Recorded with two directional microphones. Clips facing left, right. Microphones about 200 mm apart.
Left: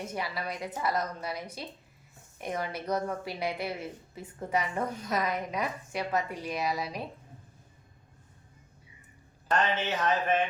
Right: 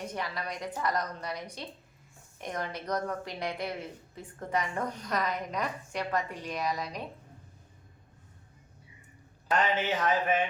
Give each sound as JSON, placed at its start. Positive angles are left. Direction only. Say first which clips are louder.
{"t": 0.0, "sound": "a woman's voice", "louder": "left 1 dB", "side_deg": 10}
{"t": 9.5, "sound": "speech", "louder": "even", "side_deg": -15}